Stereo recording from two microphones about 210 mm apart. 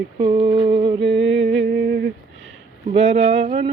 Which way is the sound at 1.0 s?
60° right (ahead or behind).